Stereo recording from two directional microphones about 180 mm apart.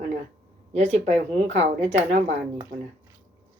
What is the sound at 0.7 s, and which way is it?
Speech, 35° right (ahead or behind).